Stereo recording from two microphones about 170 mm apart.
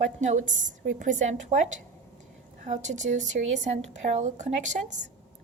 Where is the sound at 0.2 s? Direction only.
45° right (ahead or behind).